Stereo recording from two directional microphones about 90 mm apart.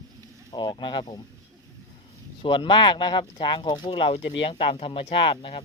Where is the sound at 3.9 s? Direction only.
90° left.